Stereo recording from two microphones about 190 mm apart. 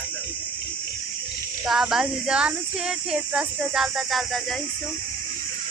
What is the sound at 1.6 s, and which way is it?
Speech, centre (ahead or behind).